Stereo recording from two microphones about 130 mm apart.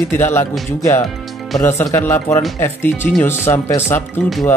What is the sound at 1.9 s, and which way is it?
Speech, 15° left (ahead or behind).